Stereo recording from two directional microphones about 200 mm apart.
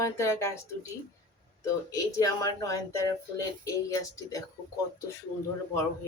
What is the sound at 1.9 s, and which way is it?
Speech, 15° left (ahead or behind).